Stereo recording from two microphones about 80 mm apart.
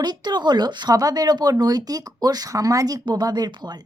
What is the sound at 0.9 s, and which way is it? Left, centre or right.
Speech, right.